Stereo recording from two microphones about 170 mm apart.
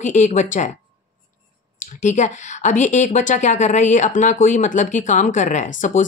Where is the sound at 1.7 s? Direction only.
45° left (ahead or behind).